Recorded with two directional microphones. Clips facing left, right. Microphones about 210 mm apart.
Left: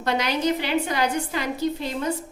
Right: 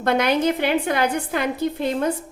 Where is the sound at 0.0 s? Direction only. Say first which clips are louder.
Right 4 dB; 55° right (ahead or behind).